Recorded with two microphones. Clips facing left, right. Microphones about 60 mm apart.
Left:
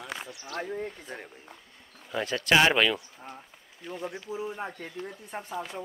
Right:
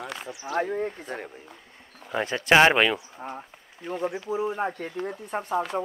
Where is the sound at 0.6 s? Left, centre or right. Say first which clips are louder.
Right 7 dB; right.